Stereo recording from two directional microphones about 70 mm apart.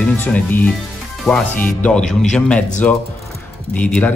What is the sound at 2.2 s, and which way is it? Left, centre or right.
Speech, centre.